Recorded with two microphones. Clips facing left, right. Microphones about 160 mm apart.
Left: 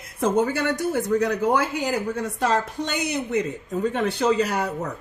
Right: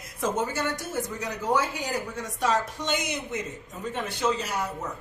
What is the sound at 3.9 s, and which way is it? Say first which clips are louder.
Speech: left 5 dB; 70° left (ahead or behind).